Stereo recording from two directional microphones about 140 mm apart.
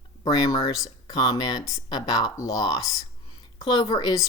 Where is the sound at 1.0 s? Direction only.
25° left (ahead or behind).